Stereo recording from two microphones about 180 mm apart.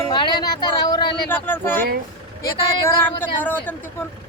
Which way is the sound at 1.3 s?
10° left (ahead or behind).